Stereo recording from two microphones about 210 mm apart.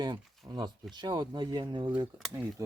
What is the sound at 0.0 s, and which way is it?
Speech, 20° right (ahead or behind).